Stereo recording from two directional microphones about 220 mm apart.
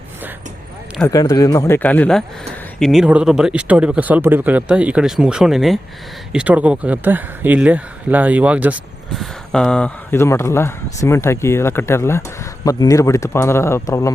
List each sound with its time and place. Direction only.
1.0 s a man's voice: 15° left (ahead or behind)